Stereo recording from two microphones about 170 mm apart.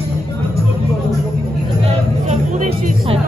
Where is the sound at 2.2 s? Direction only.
40° right (ahead or behind).